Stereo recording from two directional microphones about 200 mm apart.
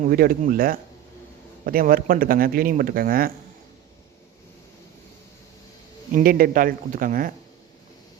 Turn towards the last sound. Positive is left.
turn(degrees=-45)  # may be behind; listen again after turning